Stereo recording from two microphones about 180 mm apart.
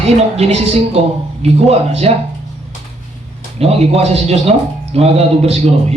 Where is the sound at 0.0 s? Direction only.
35° right (ahead or behind).